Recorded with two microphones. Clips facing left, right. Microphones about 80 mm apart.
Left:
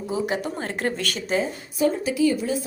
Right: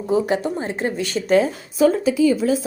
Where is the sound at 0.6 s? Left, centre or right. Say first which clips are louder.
Right 3 dB; centre.